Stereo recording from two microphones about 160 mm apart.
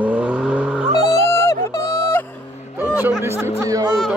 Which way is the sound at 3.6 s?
20° right (ahead or behind).